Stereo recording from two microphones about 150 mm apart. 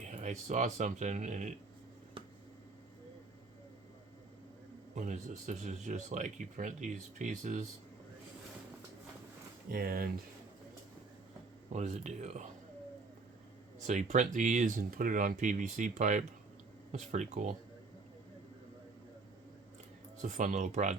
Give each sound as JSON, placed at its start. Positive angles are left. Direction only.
{"t": 0.2, "sound": "speech", "side_deg": -50}
{"t": 4.9, "sound": "speech", "side_deg": -55}
{"t": 9.6, "sound": "speech", "side_deg": -90}
{"t": 11.7, "sound": "speech", "side_deg": -50}
{"t": 13.8, "sound": "speech", "side_deg": -50}
{"t": 20.2, "sound": "speech", "side_deg": -60}